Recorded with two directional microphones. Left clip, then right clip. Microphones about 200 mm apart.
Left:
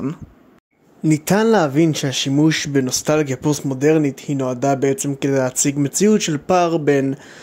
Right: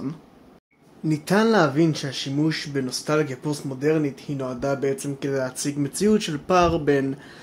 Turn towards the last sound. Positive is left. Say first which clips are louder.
# left 5 dB
turn(degrees=35)  # may be behind; listen again after turning